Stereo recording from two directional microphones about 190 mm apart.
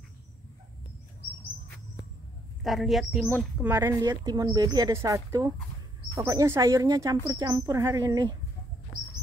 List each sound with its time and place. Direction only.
2.6 s a woman's voice: centre (ahead or behind); by 8.4 s 20° right (ahead or behind)